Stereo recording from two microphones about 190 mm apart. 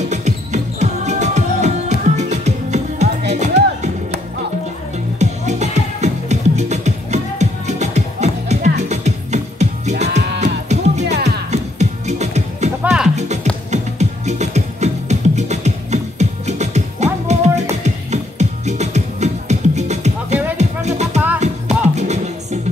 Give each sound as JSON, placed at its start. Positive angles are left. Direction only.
{"t": 0.1, "sound": "music", "side_deg": -35}
{"t": 5.2, "sound": "music", "side_deg": -35}
{"t": 10.0, "sound": "music", "side_deg": -65}
{"t": 10.4, "sound": "music", "side_deg": -35}